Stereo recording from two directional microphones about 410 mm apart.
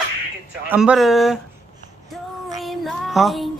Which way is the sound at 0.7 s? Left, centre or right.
Centre.